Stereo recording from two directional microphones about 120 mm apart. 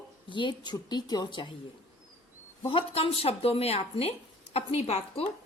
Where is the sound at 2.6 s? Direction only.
50° left (ahead or behind).